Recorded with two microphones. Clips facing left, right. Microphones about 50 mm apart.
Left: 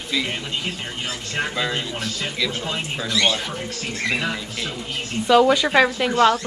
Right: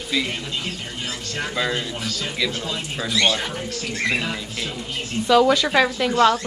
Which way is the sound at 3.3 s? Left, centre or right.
Right.